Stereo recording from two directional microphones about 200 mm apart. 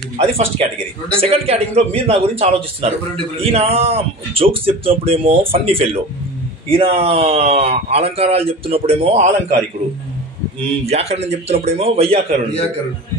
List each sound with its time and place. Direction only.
0.2 s speech: 30° right (ahead or behind)
10.9 s a man's voice: 30° right (ahead or behind)